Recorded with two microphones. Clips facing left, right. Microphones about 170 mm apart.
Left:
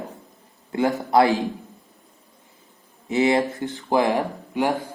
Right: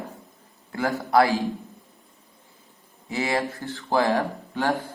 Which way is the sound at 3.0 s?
20° left (ahead or behind).